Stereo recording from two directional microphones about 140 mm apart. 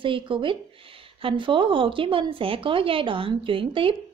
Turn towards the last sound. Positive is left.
turn(degrees=-40)  # may be behind; listen again after turning